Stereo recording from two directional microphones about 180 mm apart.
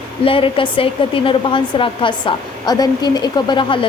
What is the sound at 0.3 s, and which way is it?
A woman's voice, 30° left (ahead or behind).